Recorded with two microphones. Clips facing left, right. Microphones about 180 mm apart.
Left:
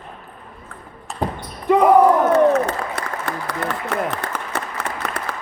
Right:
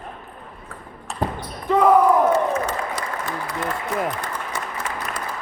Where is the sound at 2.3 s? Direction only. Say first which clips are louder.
Left 6 dB; 65° left (ahead or behind).